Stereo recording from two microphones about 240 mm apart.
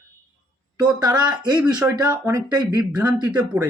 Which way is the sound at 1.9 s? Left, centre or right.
Centre.